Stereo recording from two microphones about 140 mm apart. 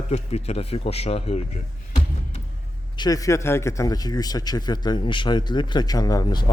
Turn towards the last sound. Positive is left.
turn(degrees=30)  # may be behind; listen again after turning